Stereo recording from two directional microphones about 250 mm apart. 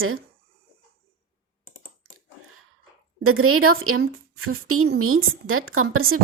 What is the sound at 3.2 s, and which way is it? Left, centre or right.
A woman's voice, right.